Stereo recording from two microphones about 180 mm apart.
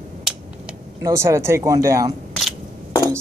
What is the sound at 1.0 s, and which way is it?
Speech, 15° right (ahead or behind).